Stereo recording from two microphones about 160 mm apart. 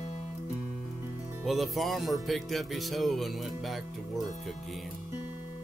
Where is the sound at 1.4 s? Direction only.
Centre (ahead or behind).